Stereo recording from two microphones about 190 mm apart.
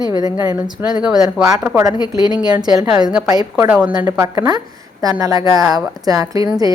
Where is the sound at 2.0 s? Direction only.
20° left (ahead or behind).